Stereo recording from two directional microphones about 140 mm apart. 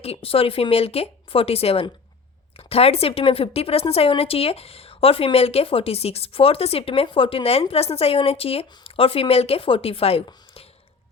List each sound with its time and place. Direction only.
0.0 s a woman's voice: 45° left (ahead or behind)